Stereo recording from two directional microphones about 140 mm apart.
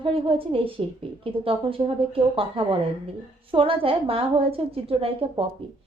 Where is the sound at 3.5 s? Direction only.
40° right (ahead or behind).